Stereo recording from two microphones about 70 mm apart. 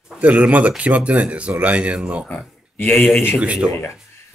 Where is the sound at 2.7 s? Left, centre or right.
Left.